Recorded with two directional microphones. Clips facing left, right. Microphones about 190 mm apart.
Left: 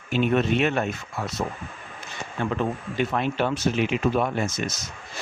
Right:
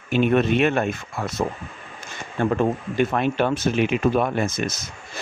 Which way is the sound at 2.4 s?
50° right (ahead or behind).